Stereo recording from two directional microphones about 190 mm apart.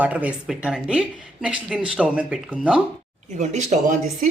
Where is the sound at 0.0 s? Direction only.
5° right (ahead or behind).